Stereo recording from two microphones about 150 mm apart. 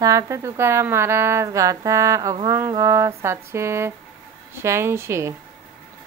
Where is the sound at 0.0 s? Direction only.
20° right (ahead or behind).